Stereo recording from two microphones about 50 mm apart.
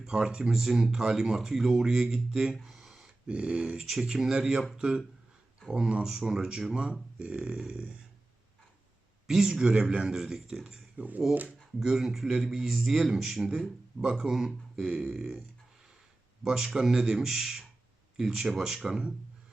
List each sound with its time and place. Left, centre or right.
0.0 s a man's voice: centre
2.6 s a sound: centre
3.2 s speech: right
3.8 s a man's voice: centre
7.2 s speech: right
9.2 s a man's voice: centre
10.9 s speech: right
11.8 s a man's voice: centre
14.3 s a man's voice: centre
15.1 s speech: centre
16.5 s a man's voice: centre